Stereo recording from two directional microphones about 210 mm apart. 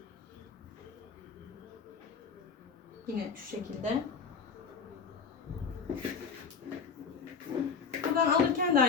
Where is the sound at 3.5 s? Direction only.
30° right (ahead or behind).